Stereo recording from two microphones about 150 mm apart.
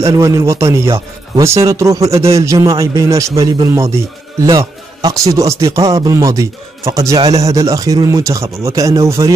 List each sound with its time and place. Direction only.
0.0 s a man's voice: 20° right (ahead or behind)